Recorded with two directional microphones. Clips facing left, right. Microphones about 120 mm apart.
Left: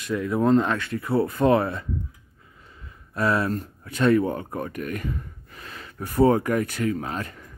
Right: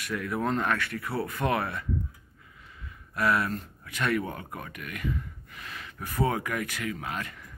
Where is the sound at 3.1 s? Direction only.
30° left (ahead or behind).